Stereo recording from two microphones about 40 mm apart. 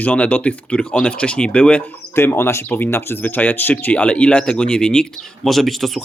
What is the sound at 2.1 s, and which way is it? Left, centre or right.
Speech, left.